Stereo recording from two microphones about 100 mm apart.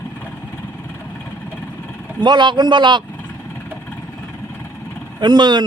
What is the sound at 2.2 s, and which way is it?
Speech, 50° right (ahead or behind).